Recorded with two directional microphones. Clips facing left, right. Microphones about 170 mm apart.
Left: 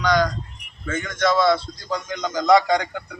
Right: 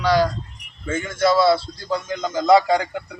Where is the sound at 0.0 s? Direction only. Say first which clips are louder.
Right 2 dB; 30° right (ahead or behind).